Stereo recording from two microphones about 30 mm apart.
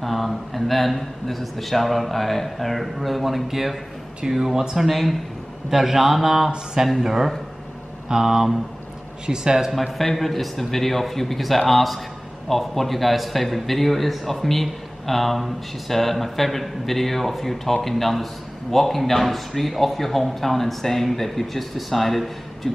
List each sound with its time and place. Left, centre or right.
0.0 s a man's voice: centre
4.8 s a man's voice: centre
5.7 s a man's voice: centre
9.2 s speech: right
9.9 s a man's voice: centre